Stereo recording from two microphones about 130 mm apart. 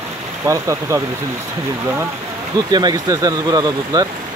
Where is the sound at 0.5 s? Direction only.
20° right (ahead or behind).